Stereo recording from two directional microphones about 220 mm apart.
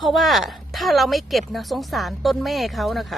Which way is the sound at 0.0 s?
Centre (ahead or behind).